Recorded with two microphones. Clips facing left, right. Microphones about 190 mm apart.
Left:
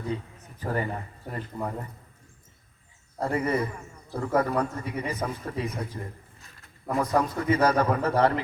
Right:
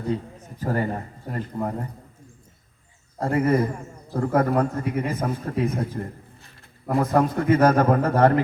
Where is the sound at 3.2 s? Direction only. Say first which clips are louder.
Right 5 dB; 50° right (ahead or behind).